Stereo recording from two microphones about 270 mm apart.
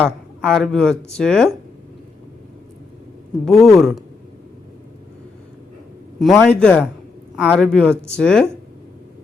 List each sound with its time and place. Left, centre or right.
0.0 s speech: centre
3.4 s speech: centre
6.1 s speech: centre